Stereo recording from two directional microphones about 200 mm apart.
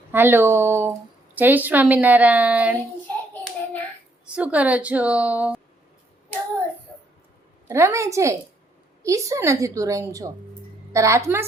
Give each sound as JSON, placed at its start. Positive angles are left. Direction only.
{"t": 0.1, "sound": "a woman's voice", "side_deg": -10}
{"t": 4.3, "sound": "a woman's voice", "side_deg": -5}
{"t": 7.7, "sound": "a woman's voice", "side_deg": -15}